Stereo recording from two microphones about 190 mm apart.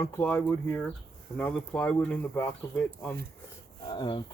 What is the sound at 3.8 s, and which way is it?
Speech, 25° left (ahead or behind).